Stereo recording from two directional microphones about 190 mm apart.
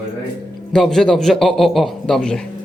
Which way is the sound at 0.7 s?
5° left (ahead or behind).